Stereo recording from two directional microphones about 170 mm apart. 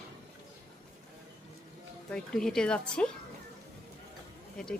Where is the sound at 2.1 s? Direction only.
5° left (ahead or behind).